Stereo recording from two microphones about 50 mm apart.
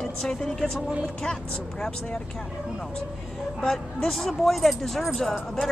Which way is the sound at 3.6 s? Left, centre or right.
Centre.